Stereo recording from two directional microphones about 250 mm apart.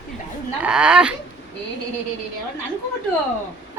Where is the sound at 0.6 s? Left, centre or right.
Centre.